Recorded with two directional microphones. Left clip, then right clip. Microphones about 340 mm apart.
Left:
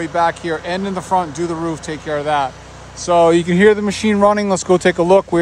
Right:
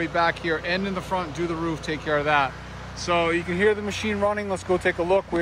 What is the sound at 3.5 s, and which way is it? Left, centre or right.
Speech, left.